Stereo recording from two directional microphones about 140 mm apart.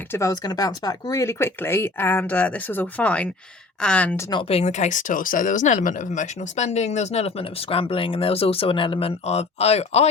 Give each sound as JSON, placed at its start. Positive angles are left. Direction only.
{"t": 0.1, "sound": "speech", "side_deg": 20}
{"t": 4.3, "sound": "speech", "side_deg": 40}